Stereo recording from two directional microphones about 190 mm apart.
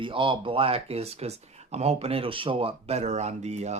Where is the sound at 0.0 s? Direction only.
25° right (ahead or behind).